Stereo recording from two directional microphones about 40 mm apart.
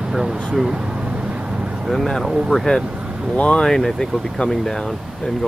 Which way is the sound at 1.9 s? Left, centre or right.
Centre.